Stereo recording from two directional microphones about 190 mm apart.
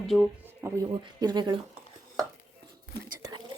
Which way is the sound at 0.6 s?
20° right (ahead or behind).